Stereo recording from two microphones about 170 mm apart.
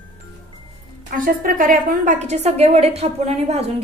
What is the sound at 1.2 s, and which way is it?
A woman's voice, 55° right (ahead or behind).